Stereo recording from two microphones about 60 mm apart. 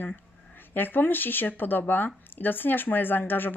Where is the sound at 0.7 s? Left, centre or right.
Left.